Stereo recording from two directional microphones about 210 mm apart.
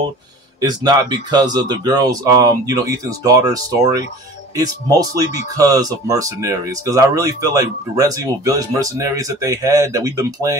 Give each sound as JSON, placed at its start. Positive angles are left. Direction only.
{"t": 0.6, "sound": "speech", "side_deg": -20}